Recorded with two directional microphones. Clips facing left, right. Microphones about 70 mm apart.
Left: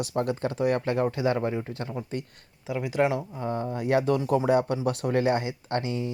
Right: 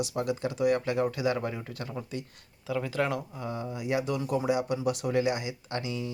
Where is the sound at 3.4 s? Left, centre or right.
Left.